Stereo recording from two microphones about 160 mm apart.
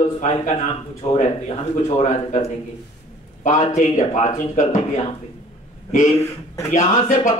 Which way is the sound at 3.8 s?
50° left (ahead or behind).